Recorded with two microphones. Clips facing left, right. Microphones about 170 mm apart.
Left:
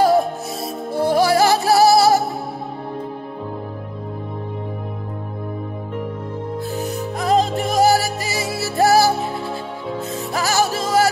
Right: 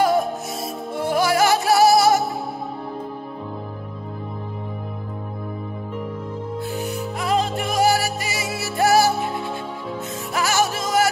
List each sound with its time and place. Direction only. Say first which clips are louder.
0.9 s music: left 4 dB; 35° left (ahead or behind)
6.8 s music: left 2 dB; 40° left (ahead or behind)